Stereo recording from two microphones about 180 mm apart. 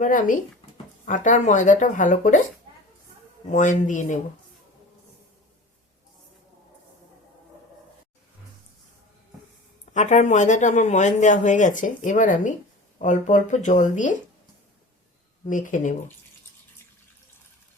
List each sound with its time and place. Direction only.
0.0 s speech: 50° left (ahead or behind)
3.5 s speech: 45° left (ahead or behind)
9.9 s speech: 40° left (ahead or behind)
15.4 s speech: 45° left (ahead or behind)